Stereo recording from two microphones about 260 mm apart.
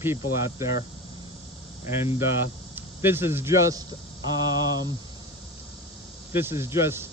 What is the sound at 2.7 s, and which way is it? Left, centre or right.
Speech, centre.